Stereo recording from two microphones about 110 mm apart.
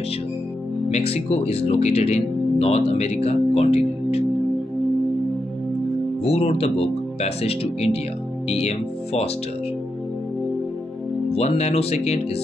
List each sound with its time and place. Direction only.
0.9 s speech: 70° left (ahead or behind)
6.2 s speech: 70° left (ahead or behind)
11.3 s speech: 75° left (ahead or behind)